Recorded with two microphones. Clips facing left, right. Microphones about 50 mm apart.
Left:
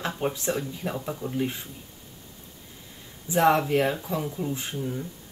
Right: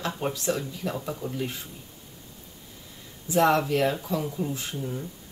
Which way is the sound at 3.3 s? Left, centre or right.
Left.